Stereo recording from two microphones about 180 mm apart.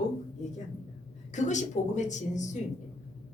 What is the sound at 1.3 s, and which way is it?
A woman's voice, 40° left (ahead or behind).